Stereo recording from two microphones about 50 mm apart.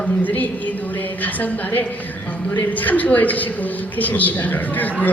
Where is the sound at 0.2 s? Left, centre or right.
Left.